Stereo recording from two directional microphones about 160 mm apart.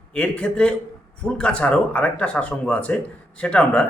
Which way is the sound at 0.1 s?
5° left (ahead or behind).